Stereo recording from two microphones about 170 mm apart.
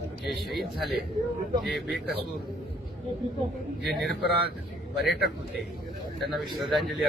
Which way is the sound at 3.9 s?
Centre (ahead or behind).